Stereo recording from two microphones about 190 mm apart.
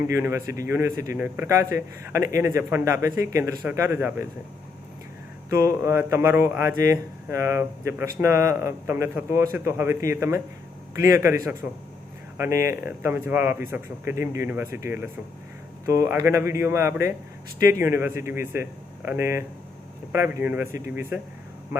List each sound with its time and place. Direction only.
0.1 s speech: 15° right (ahead or behind)
5.5 s speech: 15° right (ahead or behind)